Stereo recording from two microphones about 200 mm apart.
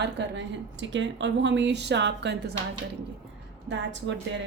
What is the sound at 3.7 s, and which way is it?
Speech, 65° right (ahead or behind).